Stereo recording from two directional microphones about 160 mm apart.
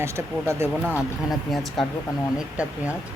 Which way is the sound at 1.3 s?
Centre (ahead or behind).